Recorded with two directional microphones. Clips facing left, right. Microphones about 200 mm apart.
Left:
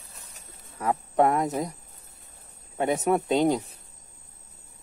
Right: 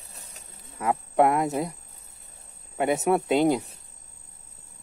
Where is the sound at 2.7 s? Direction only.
5° right (ahead or behind).